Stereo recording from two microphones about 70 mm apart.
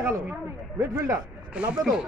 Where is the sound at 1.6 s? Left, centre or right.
Centre.